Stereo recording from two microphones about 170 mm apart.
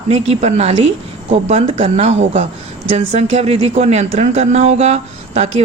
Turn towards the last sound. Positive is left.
turn(degrees=-40)  # may be behind; listen again after turning